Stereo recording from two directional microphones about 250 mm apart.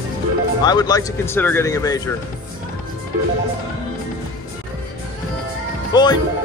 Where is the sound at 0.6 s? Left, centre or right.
Centre.